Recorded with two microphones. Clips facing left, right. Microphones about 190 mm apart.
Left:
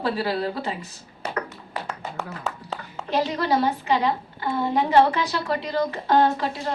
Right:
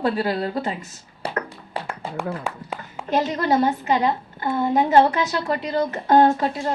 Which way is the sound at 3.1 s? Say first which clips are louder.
Right 2 dB; 45° right (ahead or behind).